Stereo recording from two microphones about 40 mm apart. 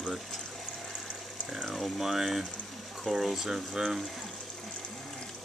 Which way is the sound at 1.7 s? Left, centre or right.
Centre.